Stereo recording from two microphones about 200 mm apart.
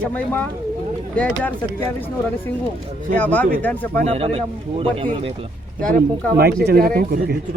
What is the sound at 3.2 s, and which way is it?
Speech, 10° left (ahead or behind).